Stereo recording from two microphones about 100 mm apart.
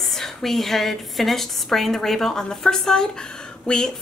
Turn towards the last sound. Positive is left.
turn(degrees=10)  # may be behind; listen again after turning